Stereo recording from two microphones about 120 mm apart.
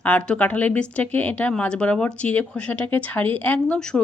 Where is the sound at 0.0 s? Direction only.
10° left (ahead or behind).